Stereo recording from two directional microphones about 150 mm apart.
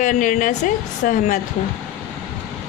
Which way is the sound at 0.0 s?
60° left (ahead or behind).